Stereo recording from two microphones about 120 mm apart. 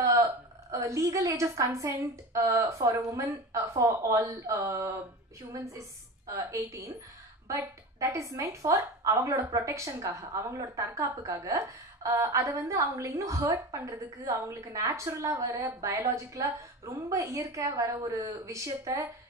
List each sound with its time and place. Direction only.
0.0 s a woman's voice: 25° right (ahead or behind)